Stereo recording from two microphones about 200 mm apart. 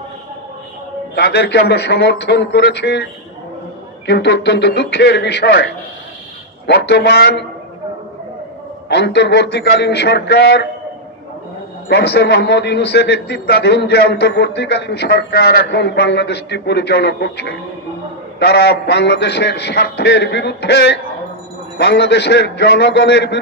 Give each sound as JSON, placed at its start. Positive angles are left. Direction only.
{"t": 1.1, "sound": "a man's voice", "side_deg": 55}
{"t": 6.7, "sound": "a man's voice", "side_deg": 55}
{"t": 8.8, "sound": "a man's voice", "side_deg": 55}
{"t": 11.9, "sound": "a man's voice", "side_deg": 55}